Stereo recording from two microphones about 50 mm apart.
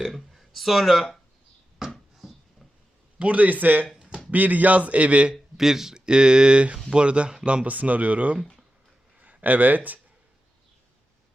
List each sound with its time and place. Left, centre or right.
0.1 s speech: centre
1.8 s hands: centre
3.2 s a man's voice: right
5.3 s a man's voice: centre; by 10.0 s right